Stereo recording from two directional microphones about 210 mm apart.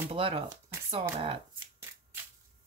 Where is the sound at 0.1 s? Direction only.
25° right (ahead or behind).